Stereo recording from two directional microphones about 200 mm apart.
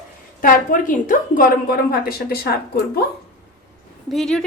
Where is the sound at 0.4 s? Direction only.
40° left (ahead or behind).